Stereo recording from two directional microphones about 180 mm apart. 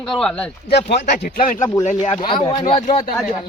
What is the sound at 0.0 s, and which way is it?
Speech, 5° left (ahead or behind).